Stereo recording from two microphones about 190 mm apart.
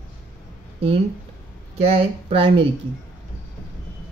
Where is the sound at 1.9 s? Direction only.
30° right (ahead or behind).